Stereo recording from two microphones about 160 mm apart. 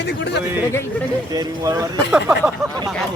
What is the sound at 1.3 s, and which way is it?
Speech, 25° right (ahead or behind).